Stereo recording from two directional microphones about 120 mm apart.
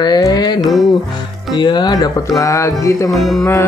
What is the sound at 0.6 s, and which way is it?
Music, centre (ahead or behind).